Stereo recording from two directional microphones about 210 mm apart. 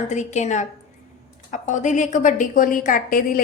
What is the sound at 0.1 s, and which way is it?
A woman's voice, 35° left (ahead or behind).